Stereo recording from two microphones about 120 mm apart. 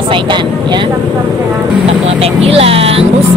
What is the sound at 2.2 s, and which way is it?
Speech, 50° right (ahead or behind).